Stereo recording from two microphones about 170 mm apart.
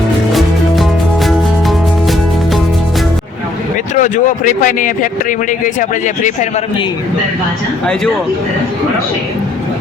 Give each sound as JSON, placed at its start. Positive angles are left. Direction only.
{"t": 0.3, "sound": "music", "side_deg": 0}
{"t": 3.9, "sound": "a man's voice", "side_deg": 50}